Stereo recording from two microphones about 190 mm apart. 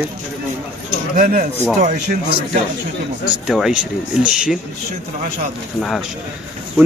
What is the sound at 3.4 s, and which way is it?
Speech, centre (ahead or behind).